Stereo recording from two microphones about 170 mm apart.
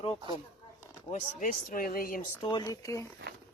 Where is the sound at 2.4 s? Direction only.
25° left (ahead or behind).